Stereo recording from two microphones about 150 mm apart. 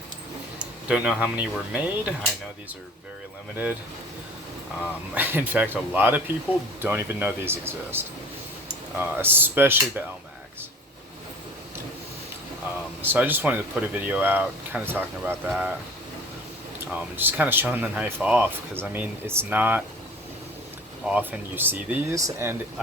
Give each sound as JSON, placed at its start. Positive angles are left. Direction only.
{"t": 0.9, "sound": "speech", "side_deg": -10}
{"t": 5.1, "sound": "speech", "side_deg": -10}
{"t": 13.0, "sound": "speech", "side_deg": -15}
{"t": 15.4, "sound": "speech", "side_deg": 0}
{"t": 16.8, "sound": "speech", "side_deg": -15}
{"t": 21.1, "sound": "speech", "side_deg": -10}